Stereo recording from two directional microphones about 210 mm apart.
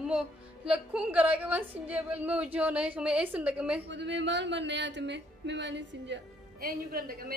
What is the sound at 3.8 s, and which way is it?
Speech, 55° right (ahead or behind).